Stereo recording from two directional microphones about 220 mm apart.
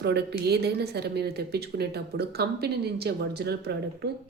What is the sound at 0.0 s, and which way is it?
A woman's voice, 50° right (ahead or behind).